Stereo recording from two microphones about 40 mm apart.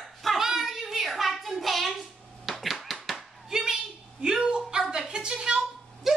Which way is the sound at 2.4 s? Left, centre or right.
Centre.